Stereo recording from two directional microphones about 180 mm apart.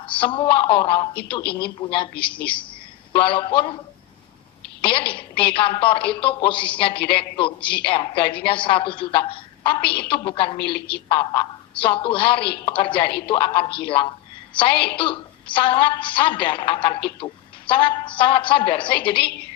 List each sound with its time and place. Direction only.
0.0 s a woman's voice: 30° left (ahead or behind)
2.2 s a woman's voice: 5° left (ahead or behind)
3.1 s a woman's voice: 30° left (ahead or behind)
4.8 s a woman's voice: 30° left (ahead or behind)
11.8 s a woman's voice: 30° left (ahead or behind)